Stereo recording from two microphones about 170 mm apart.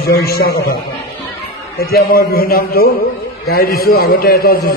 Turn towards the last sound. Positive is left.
turn(degrees=60)  # may be behind; listen again after turning